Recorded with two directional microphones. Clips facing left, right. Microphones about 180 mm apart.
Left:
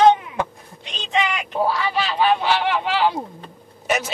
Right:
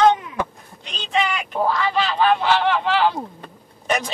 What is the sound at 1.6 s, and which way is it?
Speech, 10° left (ahead or behind).